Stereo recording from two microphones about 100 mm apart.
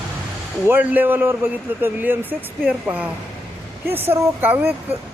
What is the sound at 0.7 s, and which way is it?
Speech, 15° right (ahead or behind).